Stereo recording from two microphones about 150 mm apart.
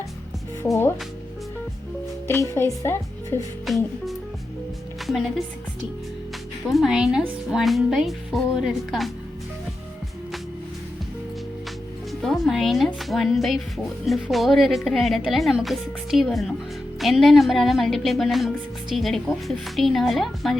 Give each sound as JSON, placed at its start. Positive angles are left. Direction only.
{"t": 0.6, "sound": "speech", "side_deg": 15}
{"t": 2.6, "sound": "speech", "side_deg": 15}
{"t": 3.7, "sound": "speech", "side_deg": 0}
{"t": 5.0, "sound": "speech", "side_deg": 0}
{"t": 6.7, "sound": "speech", "side_deg": 0}
{"t": 12.2, "sound": "speech", "side_deg": 0}